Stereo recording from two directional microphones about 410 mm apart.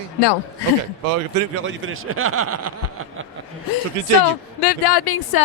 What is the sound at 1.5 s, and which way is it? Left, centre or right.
Speech, right.